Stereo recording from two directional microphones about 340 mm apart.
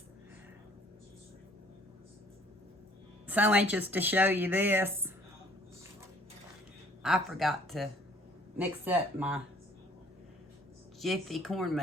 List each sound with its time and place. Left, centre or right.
3.2 s speech: centre
7.0 s speech: centre
11.0 s speech: centre